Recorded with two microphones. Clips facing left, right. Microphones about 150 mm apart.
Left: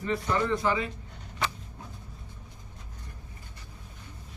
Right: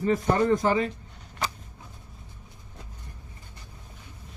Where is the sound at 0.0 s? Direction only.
45° right (ahead or behind).